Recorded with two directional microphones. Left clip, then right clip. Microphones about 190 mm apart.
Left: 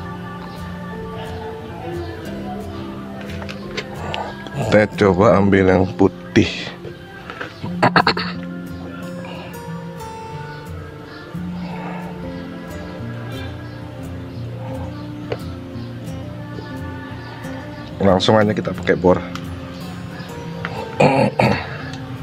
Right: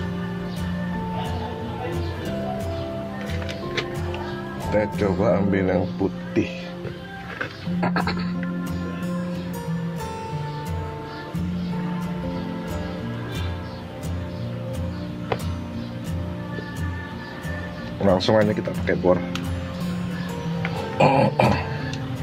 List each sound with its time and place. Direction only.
4.6 s speech: 40° left (ahead or behind)
6.0 s speech: 50° left (ahead or behind)
7.8 s music: 55° left (ahead or behind)
18.0 s speech: 30° left (ahead or behind)
21.0 s a sound: 35° left (ahead or behind)